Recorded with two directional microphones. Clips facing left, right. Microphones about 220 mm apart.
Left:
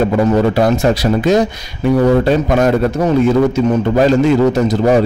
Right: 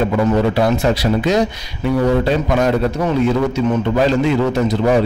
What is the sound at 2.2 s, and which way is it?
A man's voice, 50° left (ahead or behind).